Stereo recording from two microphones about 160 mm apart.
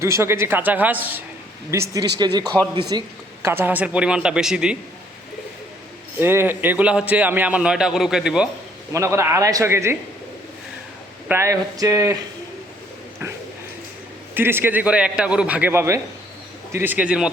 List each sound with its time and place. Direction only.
0.0 s a man's voice: 15° right (ahead or behind)
1.7 s a sound: 20° right (ahead or behind)
3.4 s a man's voice: 15° right (ahead or behind)
6.1 s a man's voice: 15° right (ahead or behind)
8.9 s a man's voice: 15° right (ahead or behind)
11.3 s a sound: 15° right (ahead or behind)
14.3 s a man's voice: 15° right (ahead or behind)